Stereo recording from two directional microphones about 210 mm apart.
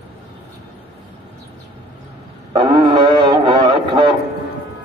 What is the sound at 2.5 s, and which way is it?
Music, 20° right (ahead or behind).